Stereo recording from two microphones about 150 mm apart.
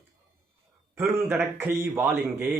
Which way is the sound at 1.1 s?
15° right (ahead or behind).